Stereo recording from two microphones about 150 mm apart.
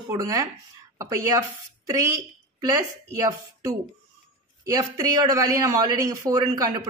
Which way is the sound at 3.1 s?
20° right (ahead or behind).